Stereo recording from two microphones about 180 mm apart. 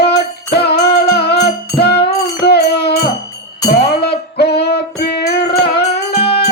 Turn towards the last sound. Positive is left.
turn(degrees=65)  # may be behind; listen again after turning